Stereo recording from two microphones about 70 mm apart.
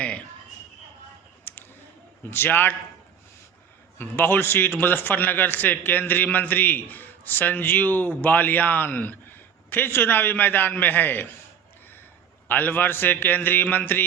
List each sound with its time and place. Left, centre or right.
1.5 s clicking: left
2.2 s a man's voice: left
3.9 s a man's voice: left
12.5 s a man's voice: left